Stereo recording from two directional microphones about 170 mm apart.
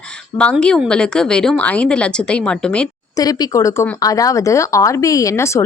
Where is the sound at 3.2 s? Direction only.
20° left (ahead or behind).